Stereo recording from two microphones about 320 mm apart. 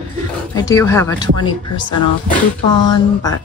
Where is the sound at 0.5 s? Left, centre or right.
Centre.